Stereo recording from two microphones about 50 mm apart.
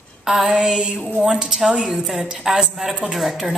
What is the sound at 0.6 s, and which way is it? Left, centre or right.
A woman's voice, centre.